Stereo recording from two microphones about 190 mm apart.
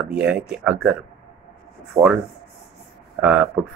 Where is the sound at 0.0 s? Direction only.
5° right (ahead or behind).